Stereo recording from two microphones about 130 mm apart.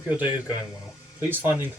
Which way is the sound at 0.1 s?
15° right (ahead or behind).